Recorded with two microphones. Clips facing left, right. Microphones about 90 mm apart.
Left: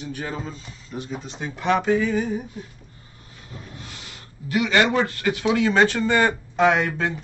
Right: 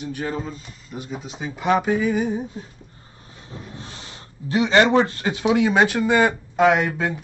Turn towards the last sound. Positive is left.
turn(degrees=-5)  # may be behind; listen again after turning